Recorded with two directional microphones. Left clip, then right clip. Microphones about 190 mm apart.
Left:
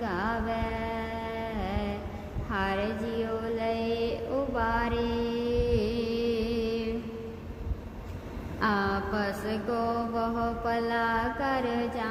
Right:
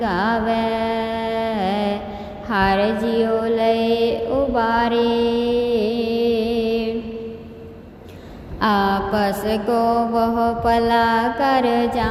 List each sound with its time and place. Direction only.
0.0 s mantra: 30° right (ahead or behind)
8.6 s mantra: 30° right (ahead or behind)